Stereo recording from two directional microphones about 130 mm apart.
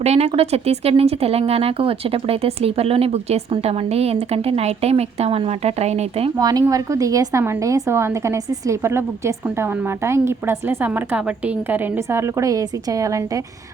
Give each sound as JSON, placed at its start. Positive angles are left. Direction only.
{"t": 0.0, "sound": "speech", "side_deg": -55}
{"t": 6.4, "sound": "a woman's voice", "side_deg": -30}